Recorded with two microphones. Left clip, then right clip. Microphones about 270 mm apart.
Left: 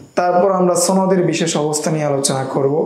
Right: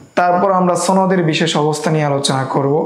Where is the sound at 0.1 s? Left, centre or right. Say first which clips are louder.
Right 1 dB; right.